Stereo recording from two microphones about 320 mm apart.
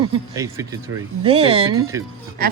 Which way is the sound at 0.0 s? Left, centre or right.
Centre.